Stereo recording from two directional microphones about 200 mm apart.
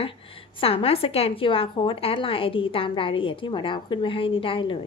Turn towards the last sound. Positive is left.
turn(degrees=25)  # may be behind; listen again after turning